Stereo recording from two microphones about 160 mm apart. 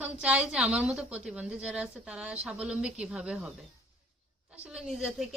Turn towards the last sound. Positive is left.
turn(degrees=-5)  # may be behind; listen again after turning